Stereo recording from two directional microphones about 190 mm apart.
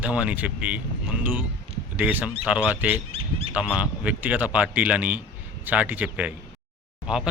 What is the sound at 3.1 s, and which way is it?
Bird, 30° right (ahead or behind).